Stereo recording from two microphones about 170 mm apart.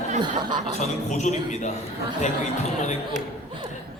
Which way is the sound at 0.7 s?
45° left (ahead or behind).